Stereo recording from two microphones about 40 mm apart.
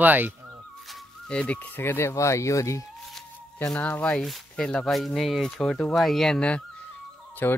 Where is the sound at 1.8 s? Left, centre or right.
Left.